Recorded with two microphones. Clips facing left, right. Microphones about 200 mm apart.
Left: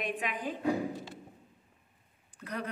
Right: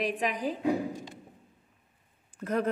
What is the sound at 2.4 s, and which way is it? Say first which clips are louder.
Speech: right 9 dB; 45° right (ahead or behind).